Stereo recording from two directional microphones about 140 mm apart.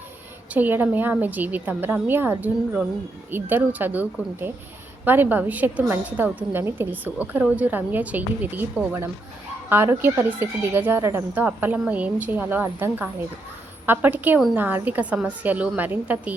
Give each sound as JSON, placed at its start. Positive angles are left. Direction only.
{"t": 0.5, "sound": "speech", "side_deg": -15}